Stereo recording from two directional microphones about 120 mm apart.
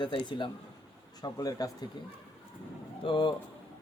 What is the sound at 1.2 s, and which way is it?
Speech, 30° left (ahead or behind).